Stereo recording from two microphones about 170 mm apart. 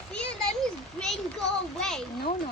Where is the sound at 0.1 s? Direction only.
5° left (ahead or behind).